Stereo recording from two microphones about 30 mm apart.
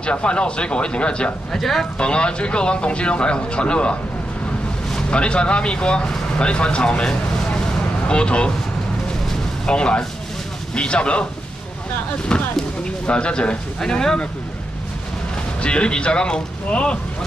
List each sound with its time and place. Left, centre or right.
0.0 s speech: left
1.5 s speech: centre
2.0 s speech: left
5.1 s speech: left
7.6 s vehicle: left
9.7 s speech: left
12.3 s speech: left
13.7 s speech: left
15.6 s speech: left